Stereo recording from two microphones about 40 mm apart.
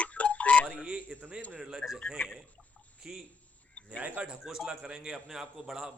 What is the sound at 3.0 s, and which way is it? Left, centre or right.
Speech, centre.